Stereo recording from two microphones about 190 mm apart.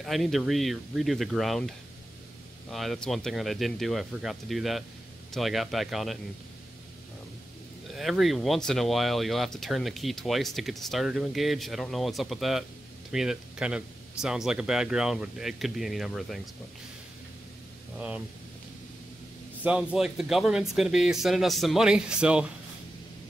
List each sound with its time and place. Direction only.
0.0 s speech: centre (ahead or behind)
2.7 s speech: centre (ahead or behind)
7.9 s speech: centre (ahead or behind)
17.9 s speech: 5° right (ahead or behind)
19.6 s speech: 5° right (ahead or behind)